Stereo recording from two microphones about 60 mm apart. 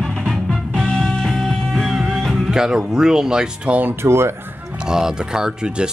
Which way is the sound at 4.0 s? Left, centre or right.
Right.